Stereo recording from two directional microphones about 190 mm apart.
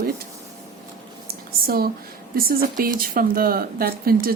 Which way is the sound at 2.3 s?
50° right (ahead or behind).